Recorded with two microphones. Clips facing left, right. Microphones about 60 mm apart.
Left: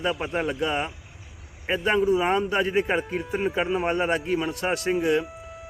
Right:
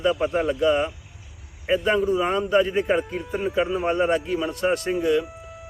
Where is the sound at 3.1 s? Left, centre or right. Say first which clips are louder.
Even; centre.